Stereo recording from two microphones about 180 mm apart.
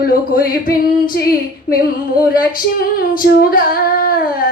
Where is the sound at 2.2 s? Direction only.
55° left (ahead or behind).